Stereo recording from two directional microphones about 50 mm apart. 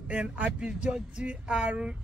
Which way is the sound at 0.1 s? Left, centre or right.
Right.